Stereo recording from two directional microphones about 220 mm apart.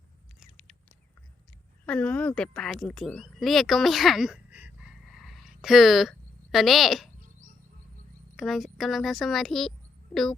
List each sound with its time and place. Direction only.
0.3 s a sound: 5° left (ahead or behind)
1.9 s speech: 5° left (ahead or behind)
8.4 s speech: centre (ahead or behind)